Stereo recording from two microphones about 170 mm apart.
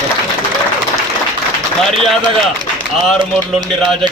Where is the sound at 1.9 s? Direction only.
30° right (ahead or behind).